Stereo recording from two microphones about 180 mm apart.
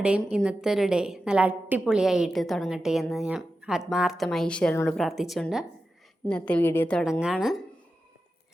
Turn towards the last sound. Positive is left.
turn(degrees=0)  # may be behind; listen again after turning